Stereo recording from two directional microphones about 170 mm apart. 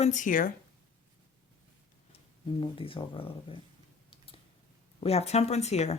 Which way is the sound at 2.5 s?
30° left (ahead or behind).